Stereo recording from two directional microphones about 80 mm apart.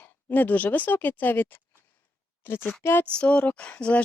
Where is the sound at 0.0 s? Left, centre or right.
Left.